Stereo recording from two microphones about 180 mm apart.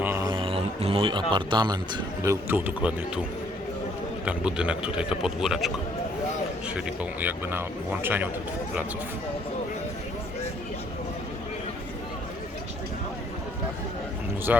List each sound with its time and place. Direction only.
0.0 s a man's voice: 15° right (ahead or behind)
4.3 s speech: 5° right (ahead or behind)
6.7 s speech: 10° right (ahead or behind)
14.5 s speech: 10° right (ahead or behind)